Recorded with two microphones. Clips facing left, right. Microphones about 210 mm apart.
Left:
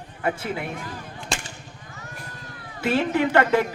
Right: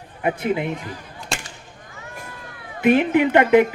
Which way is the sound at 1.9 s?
40° left (ahead or behind).